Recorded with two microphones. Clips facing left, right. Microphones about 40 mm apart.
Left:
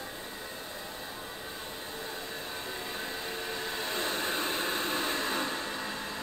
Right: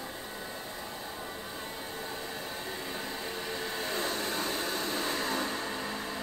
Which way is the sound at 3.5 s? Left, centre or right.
Left.